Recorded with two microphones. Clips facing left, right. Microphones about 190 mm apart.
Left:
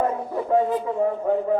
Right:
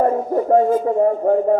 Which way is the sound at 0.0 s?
45° right (ahead or behind).